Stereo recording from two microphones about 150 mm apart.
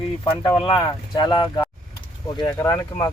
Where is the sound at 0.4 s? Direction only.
30° left (ahead or behind).